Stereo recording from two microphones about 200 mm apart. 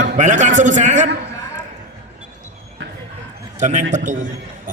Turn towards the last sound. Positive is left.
turn(degrees=-40)  # may be behind; listen again after turning